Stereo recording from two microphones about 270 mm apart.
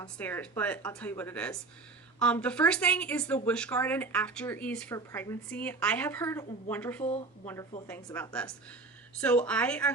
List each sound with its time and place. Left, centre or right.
0.0 s a woman's voice: centre
7.0 s speech: left
7.4 s a woman's voice: centre